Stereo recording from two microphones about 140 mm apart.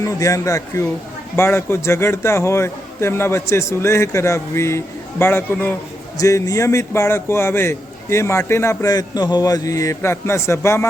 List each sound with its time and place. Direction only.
0.0 s a man's voice: 20° left (ahead or behind)